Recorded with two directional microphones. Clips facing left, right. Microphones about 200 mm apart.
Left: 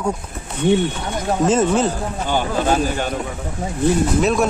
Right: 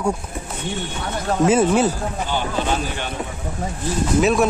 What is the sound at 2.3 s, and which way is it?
Speech, 45° left (ahead or behind).